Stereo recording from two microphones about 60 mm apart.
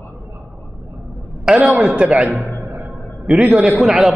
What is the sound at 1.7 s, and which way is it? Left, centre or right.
Speech, centre.